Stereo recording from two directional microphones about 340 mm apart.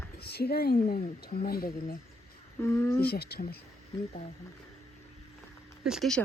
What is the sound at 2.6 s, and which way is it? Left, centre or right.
Speech, centre.